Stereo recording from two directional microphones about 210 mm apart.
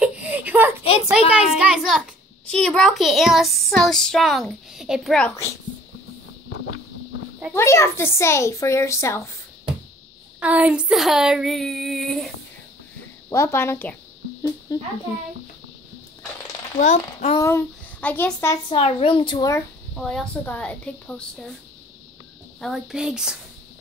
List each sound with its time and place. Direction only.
0.0 s a sound: 5° right (ahead or behind)
1.3 s a child's voice: 5° right (ahead or behind)
7.5 s speech: 15° left (ahead or behind)
10.4 s speech: 5° right (ahead or behind)
13.3 s speech: 10° left (ahead or behind)
16.7 s speech: 35° left (ahead or behind)
17.4 s a child's voice: 10° left (ahead or behind)
18.7 s a woman's voice: 25° left (ahead or behind)
20.0 s speech: 5° left (ahead or behind)
22.6 s speech: centre (ahead or behind)